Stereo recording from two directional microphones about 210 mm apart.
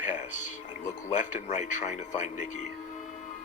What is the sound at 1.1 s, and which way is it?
Speech, 35° left (ahead or behind).